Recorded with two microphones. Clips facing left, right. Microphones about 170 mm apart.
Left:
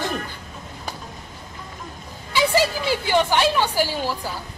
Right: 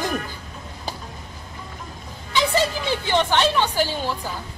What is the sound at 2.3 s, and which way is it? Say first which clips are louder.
A woman's voice: left 1 dB; 10° left (ahead or behind).